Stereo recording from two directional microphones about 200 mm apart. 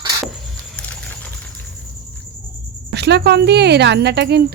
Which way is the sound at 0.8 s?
5° left (ahead or behind).